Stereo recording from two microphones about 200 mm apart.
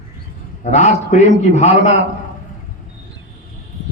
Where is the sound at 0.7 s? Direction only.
35° left (ahead or behind).